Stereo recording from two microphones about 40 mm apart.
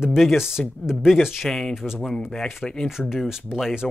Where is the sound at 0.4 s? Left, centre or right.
Centre.